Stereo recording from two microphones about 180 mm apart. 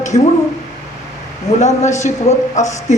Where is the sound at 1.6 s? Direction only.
40° left (ahead or behind).